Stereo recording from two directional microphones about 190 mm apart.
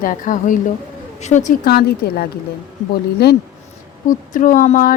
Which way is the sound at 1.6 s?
55° left (ahead or behind).